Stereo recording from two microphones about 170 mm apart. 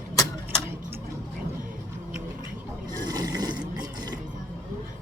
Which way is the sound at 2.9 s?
20° right (ahead or behind).